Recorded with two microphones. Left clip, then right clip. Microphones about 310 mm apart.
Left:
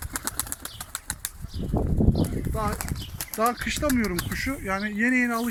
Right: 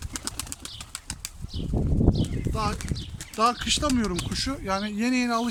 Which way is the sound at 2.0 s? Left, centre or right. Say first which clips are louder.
Right 2 dB; left.